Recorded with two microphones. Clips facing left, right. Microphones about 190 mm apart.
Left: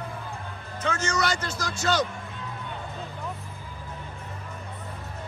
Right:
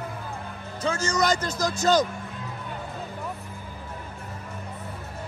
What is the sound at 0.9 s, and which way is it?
Speech, 30° right (ahead or behind).